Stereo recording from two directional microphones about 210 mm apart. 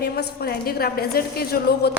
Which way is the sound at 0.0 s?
50° left (ahead or behind).